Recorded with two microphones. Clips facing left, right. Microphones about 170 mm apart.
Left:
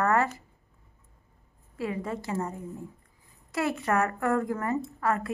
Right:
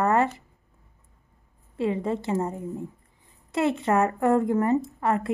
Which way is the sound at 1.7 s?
25° right (ahead or behind).